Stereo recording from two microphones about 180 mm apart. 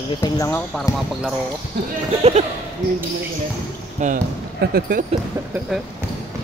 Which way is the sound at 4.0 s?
45° right (ahead or behind).